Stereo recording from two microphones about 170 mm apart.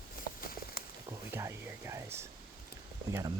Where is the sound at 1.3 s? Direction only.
15° right (ahead or behind).